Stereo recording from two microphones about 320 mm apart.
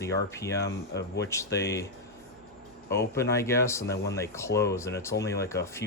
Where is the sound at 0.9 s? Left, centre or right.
Left.